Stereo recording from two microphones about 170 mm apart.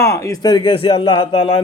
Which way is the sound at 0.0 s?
15° left (ahead or behind).